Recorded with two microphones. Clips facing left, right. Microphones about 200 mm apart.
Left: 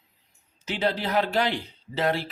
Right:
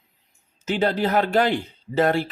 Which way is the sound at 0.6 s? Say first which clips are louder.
Right 5 dB; 50° right (ahead or behind).